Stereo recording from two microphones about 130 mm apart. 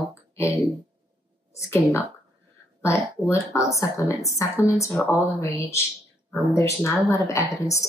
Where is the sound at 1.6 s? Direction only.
20° left (ahead or behind).